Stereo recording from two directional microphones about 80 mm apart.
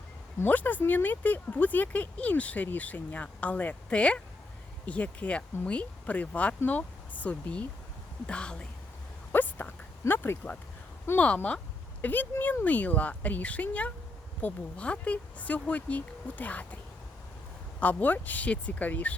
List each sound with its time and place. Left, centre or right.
0.3 s speech: left
9.3 s a sound: left
10.0 s speech: left
17.7 s speech: left